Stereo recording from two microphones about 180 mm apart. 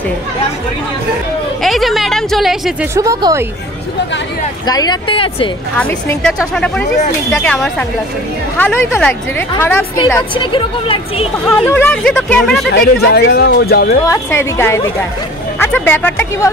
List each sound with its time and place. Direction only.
1.6 s speech: centre (ahead or behind)
2.9 s speech: 20° right (ahead or behind)
4.6 s speech: 20° left (ahead or behind)
5.8 s speech: 10° left (ahead or behind)
10.3 s speech: 30° left (ahead or behind)
11.4 s speech: 10° left (ahead or behind)
12.8 s speech: 60° left (ahead or behind)
14.0 s speech: 15° left (ahead or behind)